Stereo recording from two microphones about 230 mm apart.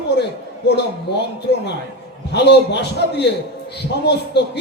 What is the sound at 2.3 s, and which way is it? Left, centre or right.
A man's voice, left.